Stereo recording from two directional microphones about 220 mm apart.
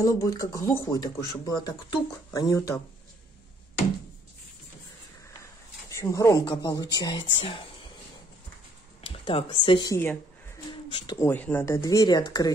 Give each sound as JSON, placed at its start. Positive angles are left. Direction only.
{"t": 0.0, "sound": "speech", "side_deg": 15}
{"t": 5.9, "sound": "speech", "side_deg": 15}
{"t": 9.0, "sound": "speech", "side_deg": 25}